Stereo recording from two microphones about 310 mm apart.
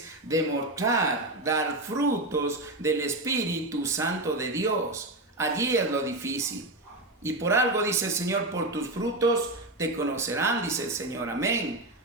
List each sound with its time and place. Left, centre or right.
0.3 s speech: centre